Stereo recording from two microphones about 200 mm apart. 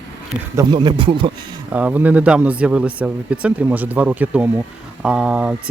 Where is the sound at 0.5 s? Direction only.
20° right (ahead or behind).